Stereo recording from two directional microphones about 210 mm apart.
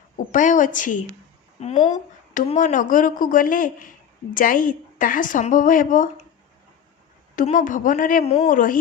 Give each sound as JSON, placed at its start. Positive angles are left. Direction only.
{"t": 0.3, "sound": "a woman's voice", "side_deg": 40}
{"t": 7.3, "sound": "a woman's voice", "side_deg": 40}